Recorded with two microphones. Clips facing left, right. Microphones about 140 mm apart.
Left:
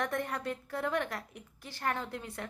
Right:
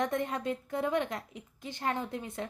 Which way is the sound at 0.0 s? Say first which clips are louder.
Right 3 dB; 20° right (ahead or behind).